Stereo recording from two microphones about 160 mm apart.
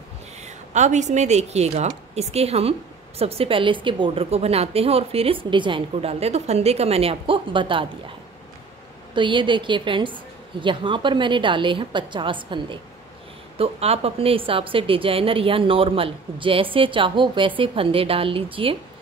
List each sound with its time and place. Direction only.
0.4 s a woman's voice: 45° right (ahead or behind)
9.1 s a woman's voice: 30° right (ahead or behind)